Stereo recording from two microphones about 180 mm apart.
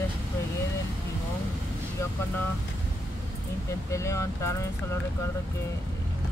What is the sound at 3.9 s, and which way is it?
Speech, 15° left (ahead or behind).